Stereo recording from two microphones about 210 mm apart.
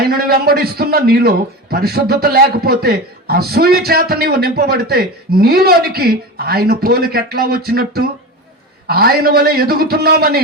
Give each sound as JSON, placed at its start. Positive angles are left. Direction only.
{"t": 0.0, "sound": "a man's voice", "side_deg": -45}